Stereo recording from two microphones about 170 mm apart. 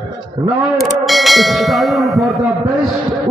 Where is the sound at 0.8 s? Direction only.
Centre (ahead or behind).